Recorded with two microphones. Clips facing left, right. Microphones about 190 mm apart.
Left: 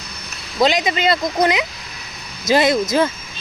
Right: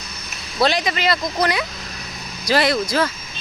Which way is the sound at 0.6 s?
20° left (ahead or behind).